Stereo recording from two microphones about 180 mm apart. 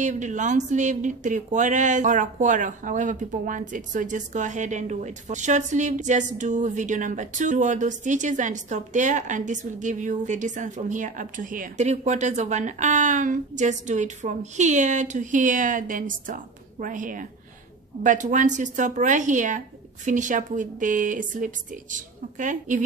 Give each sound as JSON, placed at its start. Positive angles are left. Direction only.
{"t": 0.0, "sound": "speech", "side_deg": -45}